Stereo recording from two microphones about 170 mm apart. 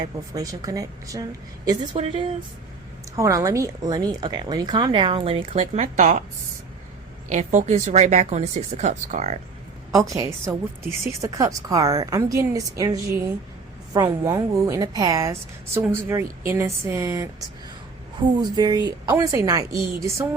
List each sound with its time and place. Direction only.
0.0 s speech: 20° right (ahead or behind)
3.2 s speech: 20° right (ahead or behind); by 6.2 s 50° right (ahead or behind)
7.3 s speech: 45° right (ahead or behind)
9.9 s a woman's voice: 20° right (ahead or behind)
18.3 s speech: 25° right (ahead or behind)